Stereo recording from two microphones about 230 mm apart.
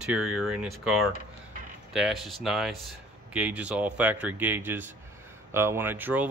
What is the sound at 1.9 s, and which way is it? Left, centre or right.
Speech, centre.